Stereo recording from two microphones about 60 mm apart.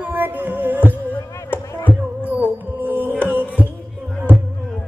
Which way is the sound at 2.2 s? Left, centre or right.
Right.